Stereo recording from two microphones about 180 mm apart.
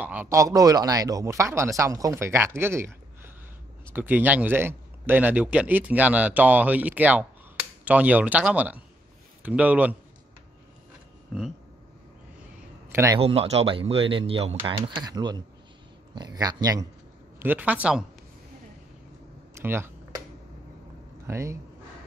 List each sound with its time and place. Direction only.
0.0 s a man's voice: 10° right (ahead or behind)
3.9 s a man's voice: 10° right (ahead or behind)
12.9 s a man's voice: 15° right (ahead or behind)
13.2 s speech: 35° right (ahead or behind)
17.4 s a man's voice: 10° right (ahead or behind)
19.6 s a man's voice: 15° right (ahead or behind)
21.3 s a man's voice: 15° right (ahead or behind)